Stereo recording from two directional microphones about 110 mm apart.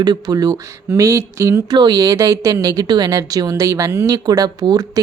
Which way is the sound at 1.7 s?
40° right (ahead or behind).